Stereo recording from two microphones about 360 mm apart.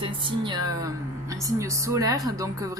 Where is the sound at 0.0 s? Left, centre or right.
Centre.